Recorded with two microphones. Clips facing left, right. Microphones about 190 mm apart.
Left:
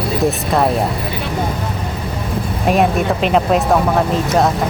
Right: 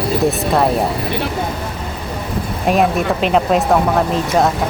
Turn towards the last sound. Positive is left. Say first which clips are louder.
# even
turn(degrees=0)  # may be behind; listen again after turning